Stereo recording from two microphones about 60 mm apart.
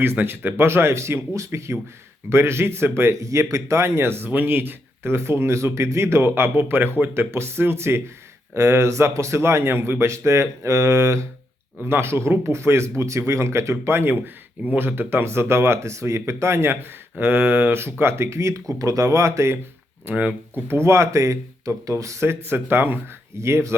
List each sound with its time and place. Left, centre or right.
0.0 s a man's voice: right
11.9 s a man's voice: right
17.2 s speech: right
20.1 s a man's voice: right
23.4 s a man's voice: right